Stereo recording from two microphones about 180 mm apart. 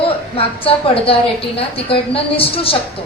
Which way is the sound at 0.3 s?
30° left (ahead or behind).